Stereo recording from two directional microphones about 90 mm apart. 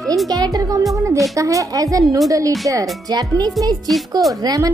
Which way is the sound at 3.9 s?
5° left (ahead or behind).